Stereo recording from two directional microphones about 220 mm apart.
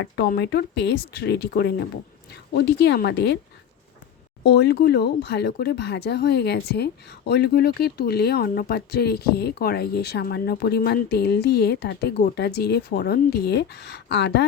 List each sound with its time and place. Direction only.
0.0 s speech: 50° left (ahead or behind)
4.4 s speech: 50° left (ahead or behind)